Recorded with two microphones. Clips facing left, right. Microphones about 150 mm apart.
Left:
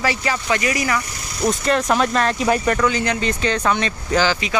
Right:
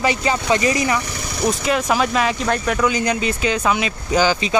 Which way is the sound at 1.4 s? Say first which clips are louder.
Left 1 dB; 5° right (ahead or behind).